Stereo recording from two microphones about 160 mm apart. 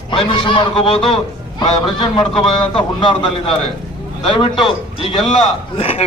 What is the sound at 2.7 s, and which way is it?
A man's voice, 35° left (ahead or behind).